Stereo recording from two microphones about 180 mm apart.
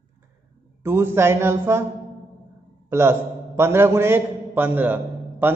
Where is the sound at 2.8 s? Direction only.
15° right (ahead or behind).